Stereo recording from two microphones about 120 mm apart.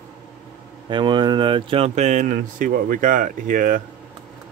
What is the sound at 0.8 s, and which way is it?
Speech, 40° right (ahead or behind).